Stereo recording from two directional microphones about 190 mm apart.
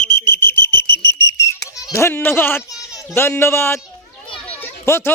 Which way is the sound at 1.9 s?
15° left (ahead or behind).